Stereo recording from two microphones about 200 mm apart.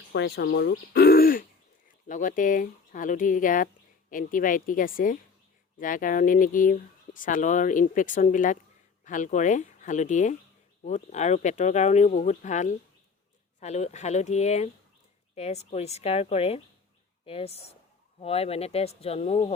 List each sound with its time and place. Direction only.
0.1 s speech: 60° left (ahead or behind); by 19.5 s 30° left (ahead or behind)